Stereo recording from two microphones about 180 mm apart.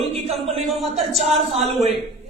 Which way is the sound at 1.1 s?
35° right (ahead or behind).